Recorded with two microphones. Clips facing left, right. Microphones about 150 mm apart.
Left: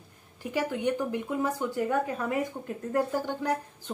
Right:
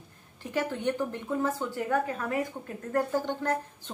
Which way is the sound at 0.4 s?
10° left (ahead or behind).